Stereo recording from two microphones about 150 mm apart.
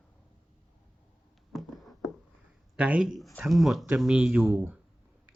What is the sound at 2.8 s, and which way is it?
Speech, 10° right (ahead or behind).